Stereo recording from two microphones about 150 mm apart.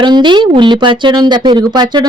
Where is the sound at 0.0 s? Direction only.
30° right (ahead or behind).